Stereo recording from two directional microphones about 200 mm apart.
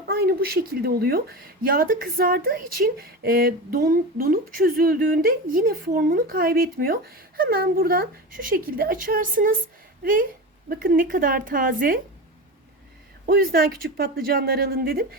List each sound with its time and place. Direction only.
0.1 s speech: 50° right (ahead or behind)
13.2 s speech: 50° right (ahead or behind)